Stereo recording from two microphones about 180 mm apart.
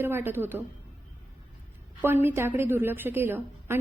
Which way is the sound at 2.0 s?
10° right (ahead or behind).